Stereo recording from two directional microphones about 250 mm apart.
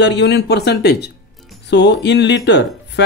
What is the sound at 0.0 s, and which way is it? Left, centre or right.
Speech, left.